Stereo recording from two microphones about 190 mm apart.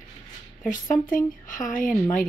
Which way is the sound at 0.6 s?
45° left (ahead or behind).